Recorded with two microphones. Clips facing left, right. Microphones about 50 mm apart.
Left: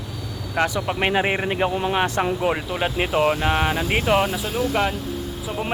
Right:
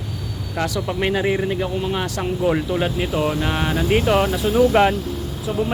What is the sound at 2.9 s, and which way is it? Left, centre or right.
Speech, left.